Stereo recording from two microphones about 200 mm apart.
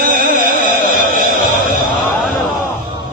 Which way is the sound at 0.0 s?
45° right (ahead or behind).